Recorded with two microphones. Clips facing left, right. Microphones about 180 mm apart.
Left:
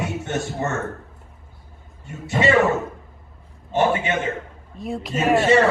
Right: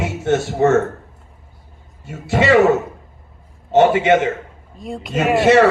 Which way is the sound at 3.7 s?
80° right.